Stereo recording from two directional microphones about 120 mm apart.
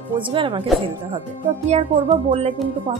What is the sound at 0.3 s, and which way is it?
Speech, 45° right (ahead or behind).